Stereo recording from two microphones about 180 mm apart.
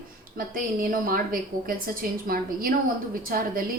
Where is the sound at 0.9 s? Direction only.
50° right (ahead or behind).